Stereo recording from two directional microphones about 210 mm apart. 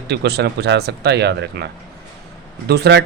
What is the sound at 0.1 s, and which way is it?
Speech, 55° right (ahead or behind).